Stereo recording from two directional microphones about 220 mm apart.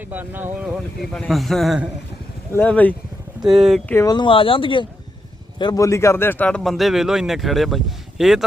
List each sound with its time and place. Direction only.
0.0 s speech: 10° right (ahead or behind)
1.1 s a man's voice: centre (ahead or behind)